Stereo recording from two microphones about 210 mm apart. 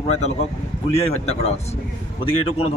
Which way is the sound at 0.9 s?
30° left (ahead or behind).